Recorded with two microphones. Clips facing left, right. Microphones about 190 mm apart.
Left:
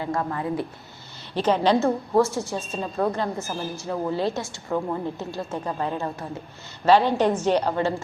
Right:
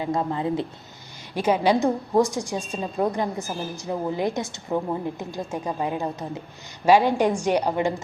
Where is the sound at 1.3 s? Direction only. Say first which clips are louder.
Even; 10° right (ahead or behind).